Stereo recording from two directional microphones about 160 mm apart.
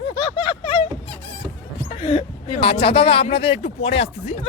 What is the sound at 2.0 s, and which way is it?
Speech, 35° left (ahead or behind).